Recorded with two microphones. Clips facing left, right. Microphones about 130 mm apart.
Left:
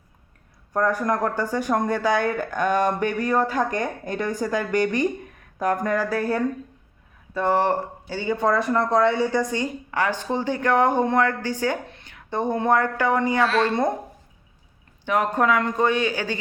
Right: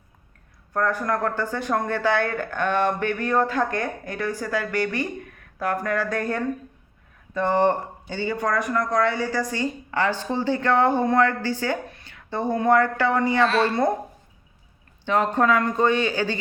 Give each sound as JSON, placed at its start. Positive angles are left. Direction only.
{"t": 0.7, "sound": "a woman's voice", "side_deg": 15}
{"t": 8.3, "sound": "a woman's voice", "side_deg": 25}
{"t": 13.4, "sound": "speech", "side_deg": 0}
{"t": 15.0, "sound": "a woman's voice", "side_deg": 10}